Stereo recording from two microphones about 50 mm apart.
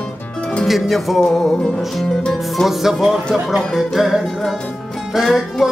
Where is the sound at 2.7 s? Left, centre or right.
Centre.